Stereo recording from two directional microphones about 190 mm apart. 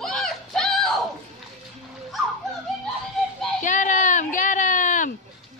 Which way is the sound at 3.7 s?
40° left (ahead or behind).